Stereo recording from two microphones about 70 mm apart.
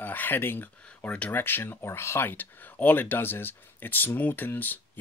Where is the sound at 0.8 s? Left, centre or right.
Centre.